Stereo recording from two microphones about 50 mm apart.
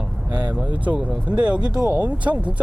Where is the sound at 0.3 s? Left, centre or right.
Right.